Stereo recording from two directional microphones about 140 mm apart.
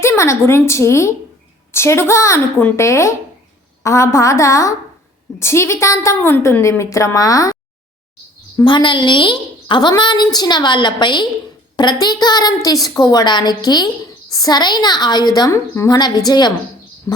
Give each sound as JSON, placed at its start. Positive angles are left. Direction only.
{"t": 0.0, "sound": "a woman's voice", "side_deg": 20}
{"t": 8.6, "sound": "a woman's voice", "side_deg": 35}
{"t": 16.0, "sound": "a woman's voice", "side_deg": 30}